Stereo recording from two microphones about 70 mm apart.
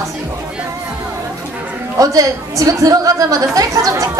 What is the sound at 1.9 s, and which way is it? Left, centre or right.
A woman's voice, right.